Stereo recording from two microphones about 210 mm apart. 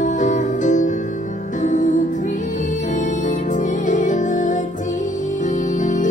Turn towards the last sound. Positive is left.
turn(degrees=35)  # may be behind; listen again after turning